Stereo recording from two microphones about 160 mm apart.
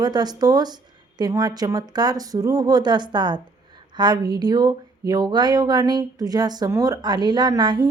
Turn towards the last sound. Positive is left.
turn(degrees=-30)  # may be behind; listen again after turning